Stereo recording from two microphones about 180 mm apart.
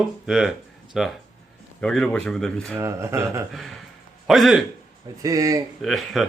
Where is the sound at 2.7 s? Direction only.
15° right (ahead or behind).